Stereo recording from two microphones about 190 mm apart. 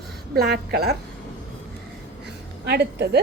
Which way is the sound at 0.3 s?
60° right (ahead or behind).